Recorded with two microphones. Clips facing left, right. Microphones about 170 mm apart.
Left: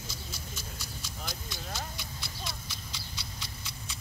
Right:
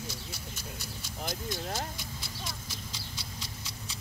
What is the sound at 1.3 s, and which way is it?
Horse, 50° right (ahead or behind).